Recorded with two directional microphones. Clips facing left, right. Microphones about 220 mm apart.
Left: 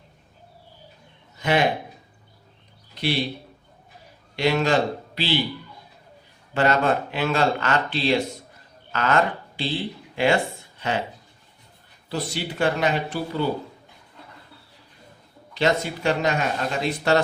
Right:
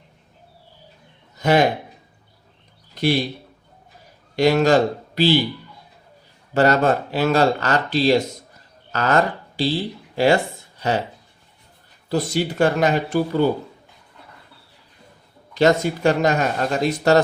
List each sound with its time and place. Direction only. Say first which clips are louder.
1.4 s a man's voice: right 5 dB; 45° right (ahead or behind)
2.9 s a sound: right 6 dB; 45° right (ahead or behind)
4.4 s speech: right 5 dB; 40° right (ahead or behind)
6.5 s speech: right 4 dB; 40° right (ahead or behind)
12.0 s speech: right 7 dB; 45° right (ahead or behind)
15.5 s speech: right 6 dB; 45° right (ahead or behind)